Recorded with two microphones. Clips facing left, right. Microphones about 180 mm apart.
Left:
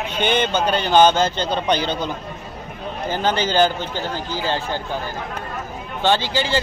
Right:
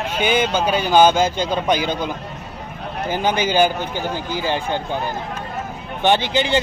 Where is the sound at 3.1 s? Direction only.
10° right (ahead or behind).